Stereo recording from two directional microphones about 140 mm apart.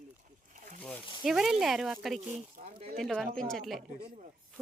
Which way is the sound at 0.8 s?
10° left (ahead or behind).